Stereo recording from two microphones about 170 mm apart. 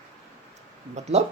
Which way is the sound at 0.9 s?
40° right (ahead or behind).